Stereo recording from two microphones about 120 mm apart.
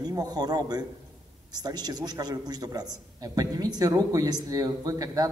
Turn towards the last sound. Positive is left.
turn(degrees=-30)  # may be behind; listen again after turning